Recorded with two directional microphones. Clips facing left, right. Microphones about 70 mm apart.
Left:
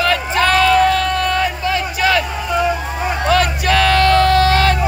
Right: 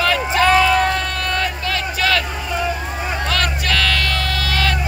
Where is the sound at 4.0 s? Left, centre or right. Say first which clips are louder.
Left 11 dB; left.